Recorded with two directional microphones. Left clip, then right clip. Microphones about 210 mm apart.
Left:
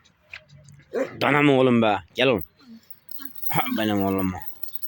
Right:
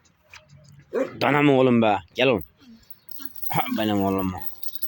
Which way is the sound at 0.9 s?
50° right (ahead or behind).